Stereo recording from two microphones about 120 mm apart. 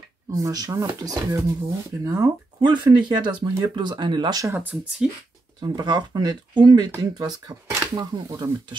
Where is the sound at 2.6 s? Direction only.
40° right (ahead or behind).